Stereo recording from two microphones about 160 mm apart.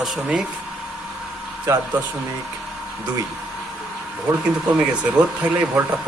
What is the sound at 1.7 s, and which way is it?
Speech, 15° right (ahead or behind).